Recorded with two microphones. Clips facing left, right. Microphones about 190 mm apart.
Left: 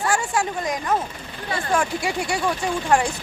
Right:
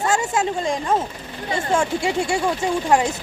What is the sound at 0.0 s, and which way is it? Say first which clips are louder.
Speech: right 2 dB; 20° right (ahead or behind).